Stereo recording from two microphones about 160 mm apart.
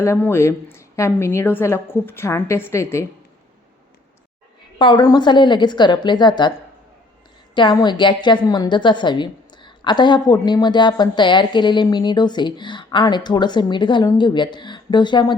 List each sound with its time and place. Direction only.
0.0 s a woman's voice: 15° left (ahead or behind)
4.8 s a woman's voice: 30° left (ahead or behind)
7.5 s a woman's voice: 30° left (ahead or behind)